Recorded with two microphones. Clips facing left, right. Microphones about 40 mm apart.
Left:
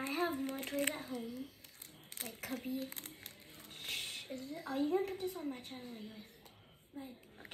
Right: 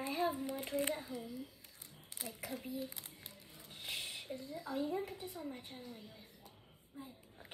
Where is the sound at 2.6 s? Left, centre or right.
Left.